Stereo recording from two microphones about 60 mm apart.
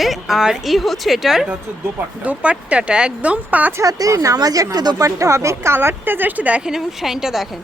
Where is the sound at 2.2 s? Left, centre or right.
Right.